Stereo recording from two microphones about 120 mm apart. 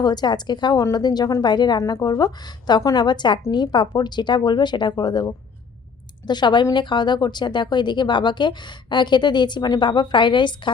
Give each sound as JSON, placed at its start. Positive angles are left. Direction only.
{"t": 0.0, "sound": "a woman's voice", "side_deg": 35}